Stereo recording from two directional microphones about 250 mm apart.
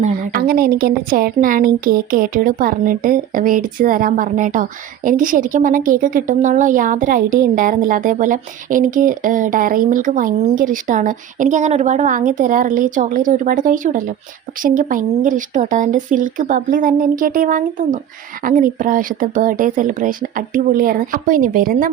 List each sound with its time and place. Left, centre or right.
0.0 s speech: right